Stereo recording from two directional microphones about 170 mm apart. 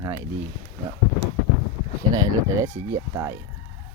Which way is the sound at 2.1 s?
20° right (ahead or behind).